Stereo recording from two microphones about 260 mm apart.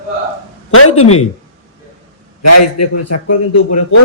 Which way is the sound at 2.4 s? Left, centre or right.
Left.